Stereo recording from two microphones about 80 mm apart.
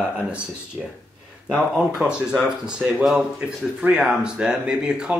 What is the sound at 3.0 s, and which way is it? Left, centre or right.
Speech, centre.